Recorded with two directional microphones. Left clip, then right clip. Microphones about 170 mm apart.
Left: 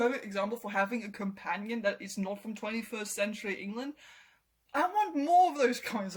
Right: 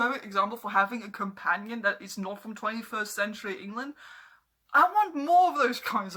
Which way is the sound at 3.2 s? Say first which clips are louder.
Right 2 dB; 35° right (ahead or behind).